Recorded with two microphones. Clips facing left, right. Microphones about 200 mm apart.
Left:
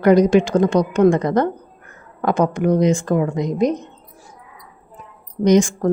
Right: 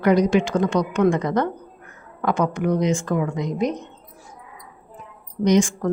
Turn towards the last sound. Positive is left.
turn(degrees=40)  # may be behind; listen again after turning